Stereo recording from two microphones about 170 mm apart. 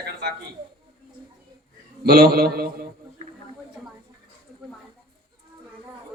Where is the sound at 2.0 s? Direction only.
65° right (ahead or behind).